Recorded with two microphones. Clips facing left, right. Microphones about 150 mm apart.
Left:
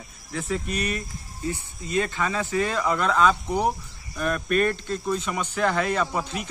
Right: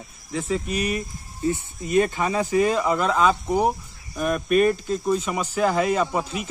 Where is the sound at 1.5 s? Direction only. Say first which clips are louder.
Right 5 dB; 20° right (ahead or behind).